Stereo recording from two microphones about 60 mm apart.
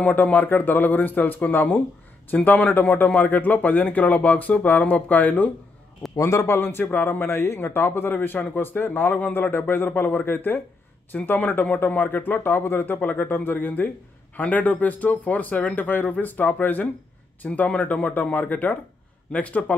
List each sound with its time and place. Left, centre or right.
0.0 s a man's voice: left
6.1 s a man's voice: left
7.2 s a man's voice: left